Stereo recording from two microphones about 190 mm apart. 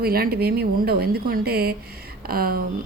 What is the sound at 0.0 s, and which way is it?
A woman's voice, 50° right (ahead or behind).